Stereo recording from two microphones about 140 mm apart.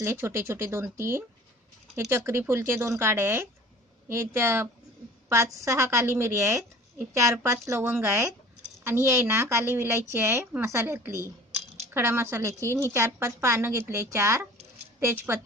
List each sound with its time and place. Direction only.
0.0 s a woman's voice: 20° right (ahead or behind)